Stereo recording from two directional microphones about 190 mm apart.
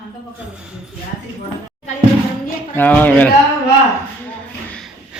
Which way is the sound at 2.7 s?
10° left (ahead or behind).